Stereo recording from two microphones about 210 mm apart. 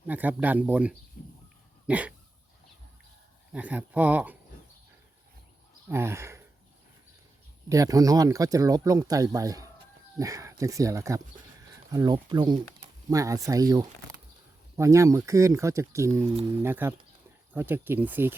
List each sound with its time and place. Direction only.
0.1 s speech: 10° right (ahead or behind)
3.5 s speech: 5° right (ahead or behind)
5.9 s speech: 10° right (ahead or behind)
7.7 s speech: 15° right (ahead or behind)